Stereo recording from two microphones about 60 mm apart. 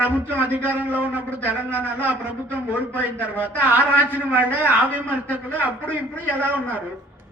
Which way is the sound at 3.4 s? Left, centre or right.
Right.